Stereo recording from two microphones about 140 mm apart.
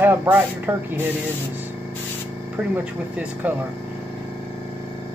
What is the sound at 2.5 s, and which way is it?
Speech, 10° right (ahead or behind).